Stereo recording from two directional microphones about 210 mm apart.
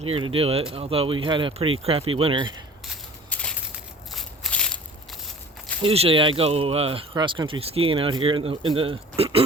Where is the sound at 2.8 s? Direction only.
5° left (ahead or behind).